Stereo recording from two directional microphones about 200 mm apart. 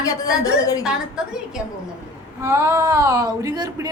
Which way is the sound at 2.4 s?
15° right (ahead or behind).